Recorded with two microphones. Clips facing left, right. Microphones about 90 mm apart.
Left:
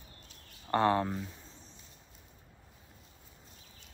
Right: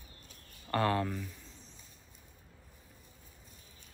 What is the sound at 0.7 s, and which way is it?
Speech, 25° left (ahead or behind).